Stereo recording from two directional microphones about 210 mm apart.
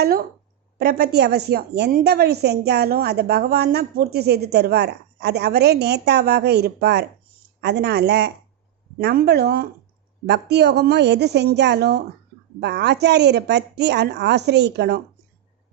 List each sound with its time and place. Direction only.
0.0 s a woman's voice: 45° right (ahead or behind)